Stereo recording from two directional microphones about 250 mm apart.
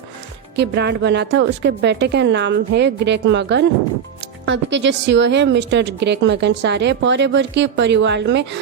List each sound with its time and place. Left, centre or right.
0.5 s speech: right